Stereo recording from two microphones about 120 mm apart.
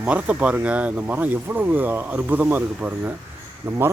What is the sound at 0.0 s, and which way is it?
Speech, 10° right (ahead or behind).